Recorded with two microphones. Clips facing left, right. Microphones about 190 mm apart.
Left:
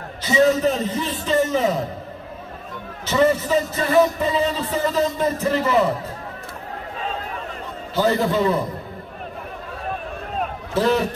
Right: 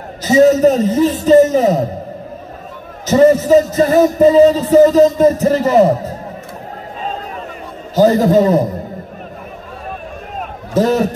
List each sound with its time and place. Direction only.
0.2 s music: 40° right (ahead or behind)
3.1 s music: 40° right (ahead or behind)
7.9 s music: 40° right (ahead or behind)
10.7 s a man's voice: 45° right (ahead or behind)